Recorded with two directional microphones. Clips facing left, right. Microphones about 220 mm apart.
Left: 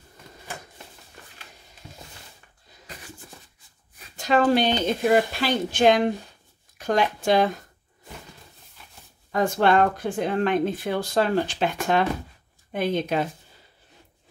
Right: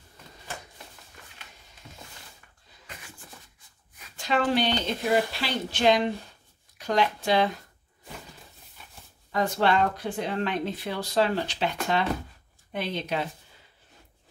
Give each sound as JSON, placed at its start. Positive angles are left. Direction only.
{"t": 4.0, "sound": "speech", "side_deg": 40}
{"t": 9.3, "sound": "speech", "side_deg": 50}